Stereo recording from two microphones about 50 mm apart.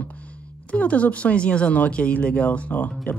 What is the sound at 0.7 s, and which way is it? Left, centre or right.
Speech, left.